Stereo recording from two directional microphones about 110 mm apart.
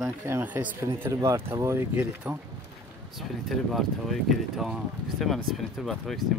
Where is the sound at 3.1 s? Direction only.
Centre (ahead or behind).